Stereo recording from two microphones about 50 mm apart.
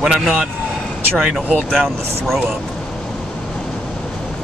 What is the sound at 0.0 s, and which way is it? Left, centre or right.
Speech, centre.